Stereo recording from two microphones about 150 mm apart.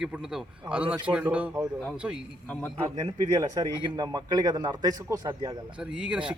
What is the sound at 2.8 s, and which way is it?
A man's voice, 30° right (ahead or behind).